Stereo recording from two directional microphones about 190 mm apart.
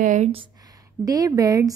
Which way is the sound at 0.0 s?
40° right (ahead or behind).